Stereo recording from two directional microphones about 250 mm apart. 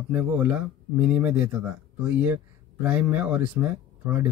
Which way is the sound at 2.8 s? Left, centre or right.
Centre.